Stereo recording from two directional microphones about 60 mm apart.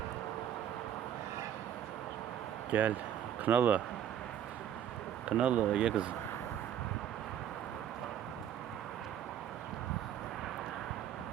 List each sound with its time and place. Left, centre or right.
2.7 s speech: right
5.4 s speech: right